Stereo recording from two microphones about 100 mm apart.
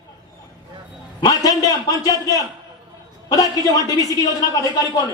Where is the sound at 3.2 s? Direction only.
35° left (ahead or behind).